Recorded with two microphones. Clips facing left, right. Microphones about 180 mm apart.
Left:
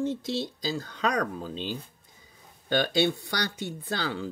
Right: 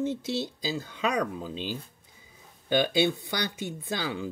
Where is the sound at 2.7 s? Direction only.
10° right (ahead or behind).